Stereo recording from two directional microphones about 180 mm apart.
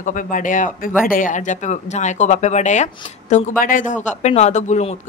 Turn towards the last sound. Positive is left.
turn(degrees=40)  # may be behind; listen again after turning